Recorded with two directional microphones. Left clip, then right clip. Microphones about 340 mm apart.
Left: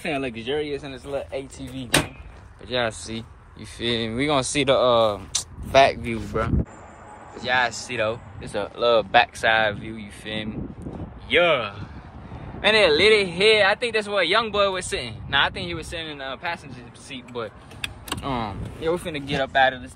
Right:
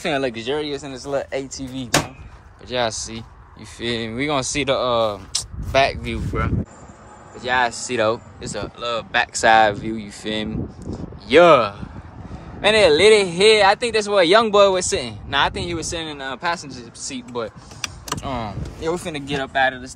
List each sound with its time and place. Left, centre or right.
0.0 s speech: centre
1.1 s speech: right
2.7 s speech: centre
7.3 s speech: centre
8.5 s speech: centre
9.3 s speech: centre
18.2 s speech: centre
18.8 s speech: centre